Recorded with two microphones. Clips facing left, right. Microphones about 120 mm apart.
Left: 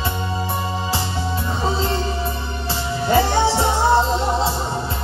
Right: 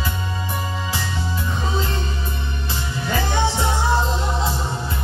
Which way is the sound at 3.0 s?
30° left (ahead or behind).